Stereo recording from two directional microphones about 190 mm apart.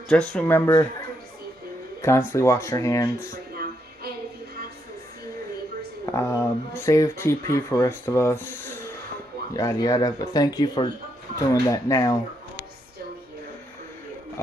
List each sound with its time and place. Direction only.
0.1 s speech: 5° left (ahead or behind)
2.0 s speech: 15° left (ahead or behind)
6.0 s speech: 15° left (ahead or behind)